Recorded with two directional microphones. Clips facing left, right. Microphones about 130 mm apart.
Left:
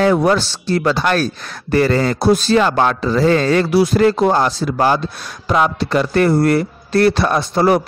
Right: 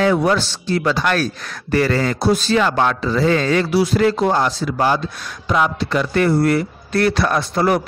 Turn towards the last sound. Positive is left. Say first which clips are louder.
# left 3 dB
turn(degrees=30)  # may be behind; listen again after turning